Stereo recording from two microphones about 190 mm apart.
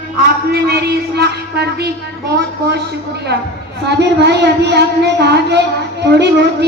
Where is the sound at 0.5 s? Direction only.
60° right (ahead or behind).